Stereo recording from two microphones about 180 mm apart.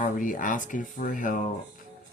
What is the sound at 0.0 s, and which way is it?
Speech, 45° left (ahead or behind).